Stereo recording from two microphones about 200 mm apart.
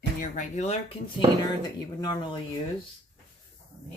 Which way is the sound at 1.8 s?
20° left (ahead or behind).